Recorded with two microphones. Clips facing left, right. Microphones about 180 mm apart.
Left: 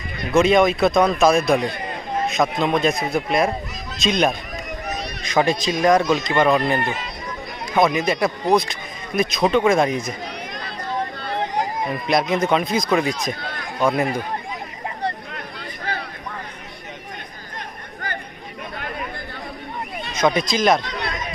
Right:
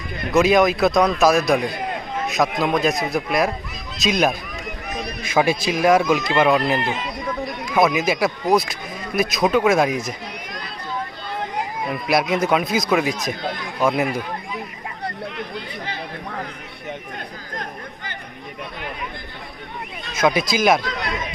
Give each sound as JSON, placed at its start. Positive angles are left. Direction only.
{"t": 0.3, "sound": "speech", "side_deg": 0}
{"t": 12.0, "sound": "speech", "side_deg": -5}
{"t": 20.2, "sound": "speech", "side_deg": -5}